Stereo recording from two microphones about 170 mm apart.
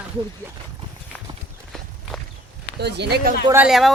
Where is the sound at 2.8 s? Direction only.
85° right; by 3.4 s 65° right (ahead or behind).